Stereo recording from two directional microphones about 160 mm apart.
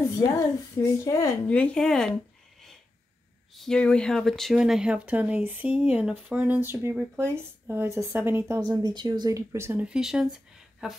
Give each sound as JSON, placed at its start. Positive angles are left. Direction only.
{"t": 0.1, "sound": "a woman's voice", "side_deg": 20}
{"t": 3.6, "sound": "speech", "side_deg": 5}
{"t": 8.5, "sound": "speech", "side_deg": -25}